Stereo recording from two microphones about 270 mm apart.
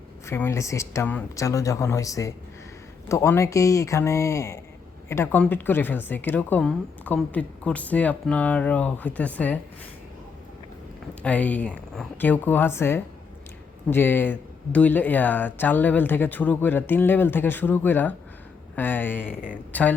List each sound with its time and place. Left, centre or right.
0.3 s speech: centre
11.2 s speech: centre
19.3 s speech: left